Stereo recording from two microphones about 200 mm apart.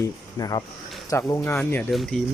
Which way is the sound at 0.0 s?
20° left (ahead or behind).